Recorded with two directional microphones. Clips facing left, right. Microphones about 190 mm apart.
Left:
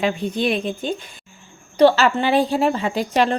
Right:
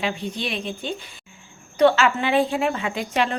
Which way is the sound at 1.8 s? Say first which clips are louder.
Left 3 dB; 35° left (ahead or behind).